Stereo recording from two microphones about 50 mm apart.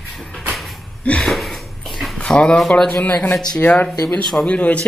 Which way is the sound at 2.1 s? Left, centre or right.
Centre.